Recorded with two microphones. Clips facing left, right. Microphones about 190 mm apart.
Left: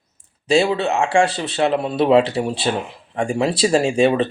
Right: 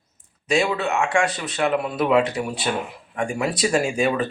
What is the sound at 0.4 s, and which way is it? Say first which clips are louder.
Speech: left 5 dB; 30° left (ahead or behind).